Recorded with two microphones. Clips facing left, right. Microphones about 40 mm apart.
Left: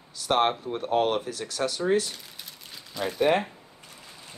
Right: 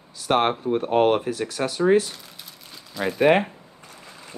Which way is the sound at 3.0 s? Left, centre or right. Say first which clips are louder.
Right 4 dB; centre.